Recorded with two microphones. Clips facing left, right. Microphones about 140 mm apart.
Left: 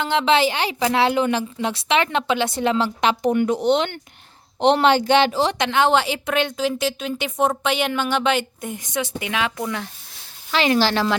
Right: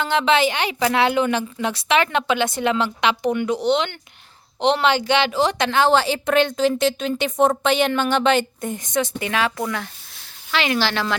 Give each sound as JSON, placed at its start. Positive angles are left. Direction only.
{"t": 0.0, "sound": "speech", "side_deg": 25}
{"t": 5.4, "sound": "speech", "side_deg": 25}
{"t": 10.5, "sound": "speech", "side_deg": 35}